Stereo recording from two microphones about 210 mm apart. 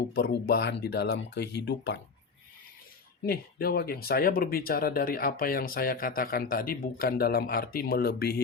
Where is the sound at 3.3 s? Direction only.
45° left (ahead or behind).